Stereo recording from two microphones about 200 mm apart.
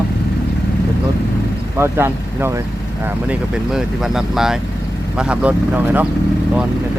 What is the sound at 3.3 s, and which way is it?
Speech, centre (ahead or behind).